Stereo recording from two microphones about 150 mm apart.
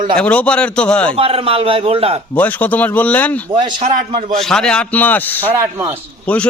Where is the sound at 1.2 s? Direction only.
40° right (ahead or behind).